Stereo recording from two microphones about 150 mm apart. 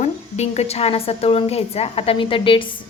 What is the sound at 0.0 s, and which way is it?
A woman's voice, 50° left (ahead or behind).